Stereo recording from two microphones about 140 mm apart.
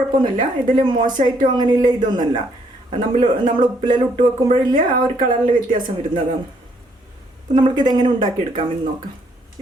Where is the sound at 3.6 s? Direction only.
35° right (ahead or behind).